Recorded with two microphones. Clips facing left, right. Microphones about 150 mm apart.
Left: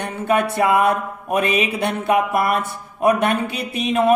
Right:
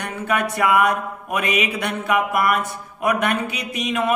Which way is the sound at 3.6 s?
30° left (ahead or behind).